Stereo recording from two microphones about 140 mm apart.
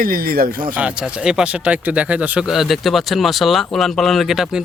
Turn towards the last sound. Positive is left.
turn(degrees=0)  # may be behind; listen again after turning